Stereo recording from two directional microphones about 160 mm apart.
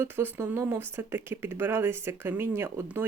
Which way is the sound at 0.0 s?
15° right (ahead or behind).